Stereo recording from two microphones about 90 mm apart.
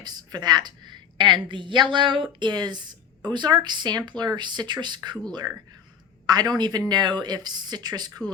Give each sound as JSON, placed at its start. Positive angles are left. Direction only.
{"t": 0.0, "sound": "a woman's voice", "side_deg": -50}
{"t": 2.4, "sound": "a woman's voice", "side_deg": -50}